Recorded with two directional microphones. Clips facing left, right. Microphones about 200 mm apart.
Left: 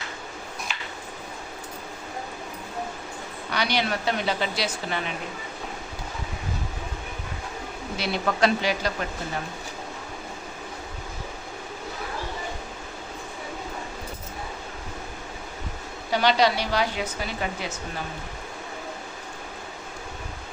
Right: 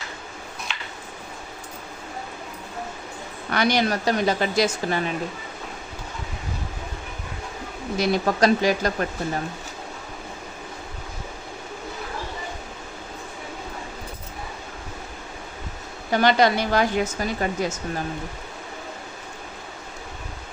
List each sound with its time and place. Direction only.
0.7 s a sound: 5° left (ahead or behind)
3.5 s speech: 50° right (ahead or behind)
7.9 s speech: 45° right (ahead or behind)
16.1 s speech: 50° right (ahead or behind)